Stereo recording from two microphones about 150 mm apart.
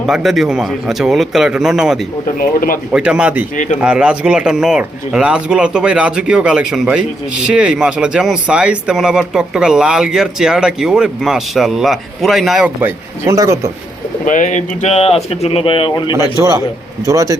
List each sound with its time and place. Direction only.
0.1 s speech: centre (ahead or behind)
2.4 s speech: 70° left (ahead or behind)
2.9 s speech: 5° right (ahead or behind)
14.3 s speech: 55° left (ahead or behind); by 16.1 s 35° left (ahead or behind)
17.1 s a man's voice: 20° right (ahead or behind)